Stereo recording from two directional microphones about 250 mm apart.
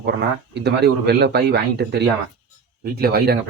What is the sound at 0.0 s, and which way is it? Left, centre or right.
Speech, right.